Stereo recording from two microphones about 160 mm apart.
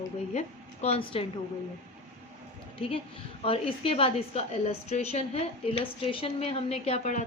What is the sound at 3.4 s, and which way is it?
A woman's voice, 35° left (ahead or behind).